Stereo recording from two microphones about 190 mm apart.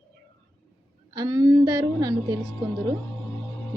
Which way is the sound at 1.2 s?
20° right (ahead or behind).